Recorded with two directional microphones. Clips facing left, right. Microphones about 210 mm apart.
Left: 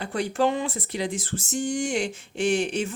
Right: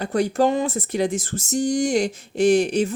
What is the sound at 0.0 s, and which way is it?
Speech, 40° right (ahead or behind).